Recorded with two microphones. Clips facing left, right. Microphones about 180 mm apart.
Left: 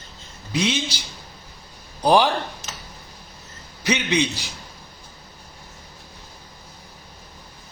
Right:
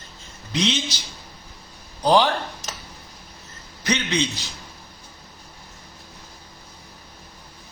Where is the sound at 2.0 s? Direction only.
15° left (ahead or behind).